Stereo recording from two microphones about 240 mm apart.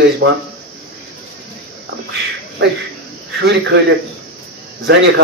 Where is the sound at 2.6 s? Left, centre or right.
Right.